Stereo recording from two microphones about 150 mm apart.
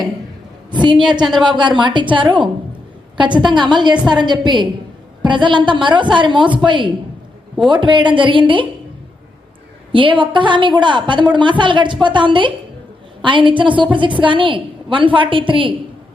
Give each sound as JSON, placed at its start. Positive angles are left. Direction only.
{"t": 0.7, "sound": "a sound", "side_deg": -30}
{"t": 1.1, "sound": "a woman's voice", "side_deg": -30}
{"t": 9.9, "sound": "a woman's voice", "side_deg": -35}